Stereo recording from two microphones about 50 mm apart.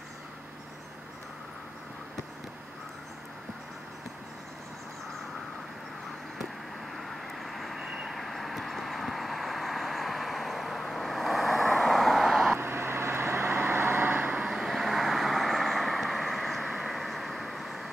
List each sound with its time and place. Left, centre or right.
7.0 s vehicle: centre
12.5 s vehicle: right
14.4 s vehicle: centre